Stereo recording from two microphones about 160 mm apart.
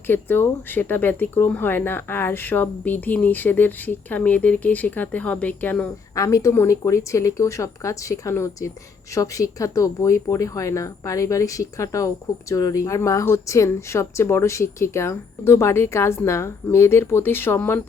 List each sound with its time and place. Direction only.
0.1 s speech: 15° left (ahead or behind)
6.1 s speech: 20° left (ahead or behind)